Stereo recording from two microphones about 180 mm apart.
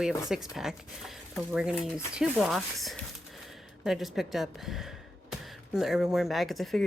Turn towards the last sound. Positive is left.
turn(degrees=0)  # may be behind; listen again after turning